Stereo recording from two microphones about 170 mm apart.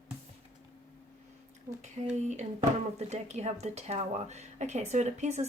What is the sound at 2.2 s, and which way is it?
Speech, 45° right (ahead or behind).